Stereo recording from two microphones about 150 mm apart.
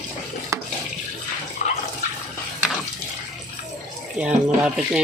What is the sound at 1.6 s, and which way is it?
Water, 50° left (ahead or behind).